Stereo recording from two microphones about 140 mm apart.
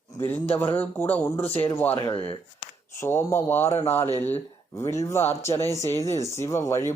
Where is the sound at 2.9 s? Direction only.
15° left (ahead or behind).